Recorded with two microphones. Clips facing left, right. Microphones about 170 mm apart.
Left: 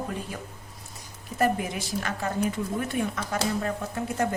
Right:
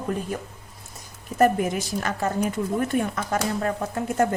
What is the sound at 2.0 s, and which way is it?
A woman's voice, 40° right (ahead or behind).